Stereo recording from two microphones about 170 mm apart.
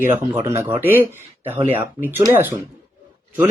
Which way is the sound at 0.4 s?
15° right (ahead or behind).